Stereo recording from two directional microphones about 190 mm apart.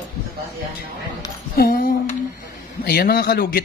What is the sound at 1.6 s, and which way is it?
A woman's voice, 50° left (ahead or behind).